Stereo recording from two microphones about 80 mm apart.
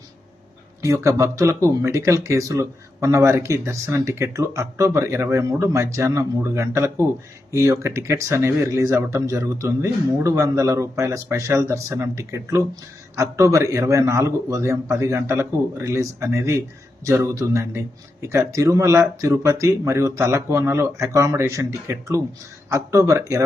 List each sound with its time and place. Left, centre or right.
0.8 s speech: right